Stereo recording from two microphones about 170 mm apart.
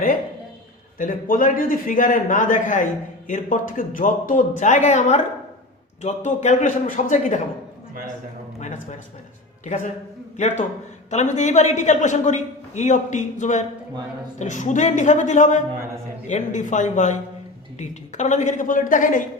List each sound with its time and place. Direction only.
0.9 s a man's voice: 55° left (ahead or behind)
8.5 s a sound: 45° left (ahead or behind)
9.6 s a man's voice: 45° left (ahead or behind)